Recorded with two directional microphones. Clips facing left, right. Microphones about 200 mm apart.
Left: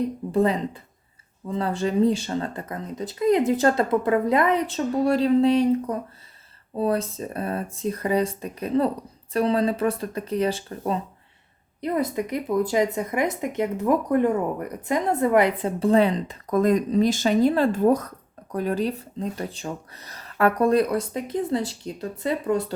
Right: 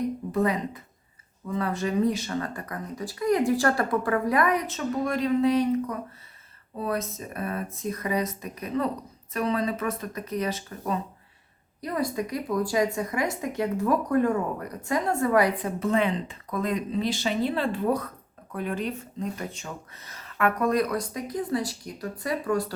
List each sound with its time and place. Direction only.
0.3 s speech: 30° left (ahead or behind)